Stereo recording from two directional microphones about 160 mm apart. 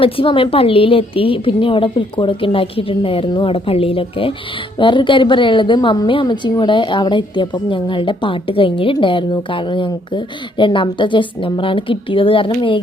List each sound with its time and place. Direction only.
0.0 s a woman's voice: 35° left (ahead or behind)